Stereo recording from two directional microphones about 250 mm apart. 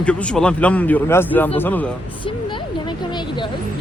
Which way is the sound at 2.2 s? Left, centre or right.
Centre.